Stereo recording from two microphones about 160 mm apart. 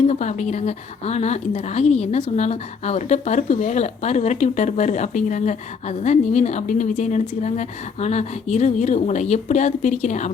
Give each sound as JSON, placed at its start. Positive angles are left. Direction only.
{"t": 0.1, "sound": "speech", "side_deg": 45}